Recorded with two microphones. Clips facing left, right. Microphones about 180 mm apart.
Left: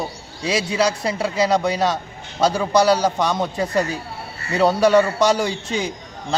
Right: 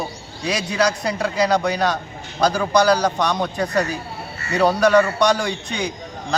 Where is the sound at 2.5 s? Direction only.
25° left (ahead or behind).